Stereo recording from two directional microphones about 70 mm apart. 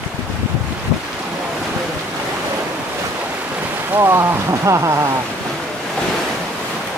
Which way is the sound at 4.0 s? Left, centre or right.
Right.